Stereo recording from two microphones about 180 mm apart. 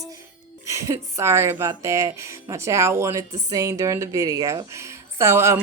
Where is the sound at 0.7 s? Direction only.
15° right (ahead or behind).